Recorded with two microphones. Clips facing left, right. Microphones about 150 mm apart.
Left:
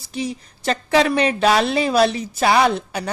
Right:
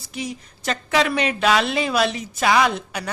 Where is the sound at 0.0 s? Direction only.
30° left (ahead or behind).